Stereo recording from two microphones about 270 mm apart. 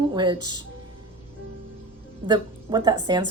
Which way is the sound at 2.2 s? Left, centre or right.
Centre.